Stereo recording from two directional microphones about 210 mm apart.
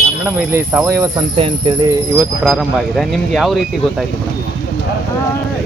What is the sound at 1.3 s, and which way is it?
Speech, 25° right (ahead or behind).